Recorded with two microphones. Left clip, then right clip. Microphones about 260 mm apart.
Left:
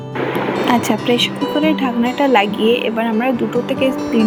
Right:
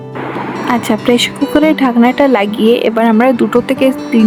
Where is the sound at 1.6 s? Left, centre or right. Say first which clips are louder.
Right 7 dB; right.